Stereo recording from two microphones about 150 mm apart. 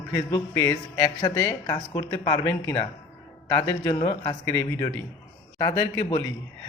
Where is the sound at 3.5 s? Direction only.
25° left (ahead or behind).